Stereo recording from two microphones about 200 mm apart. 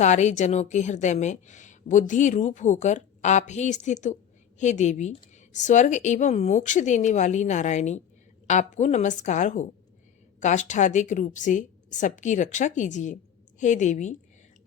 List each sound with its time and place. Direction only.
0.0 s a woman's voice: 35° left (ahead or behind)